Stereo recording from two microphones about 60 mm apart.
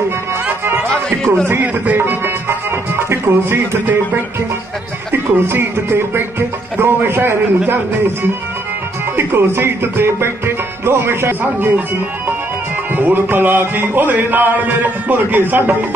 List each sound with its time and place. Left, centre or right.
1.5 s speech: right
2.0 s music: right
12.9 s music: right